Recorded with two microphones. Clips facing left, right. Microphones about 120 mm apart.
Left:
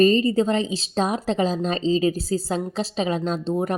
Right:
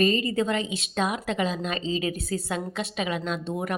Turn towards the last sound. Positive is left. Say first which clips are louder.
# left 5 dB
turn(degrees=30)  # may be behind; listen again after turning